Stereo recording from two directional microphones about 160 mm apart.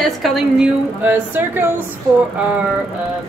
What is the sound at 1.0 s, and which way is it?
Speech, 10° right (ahead or behind).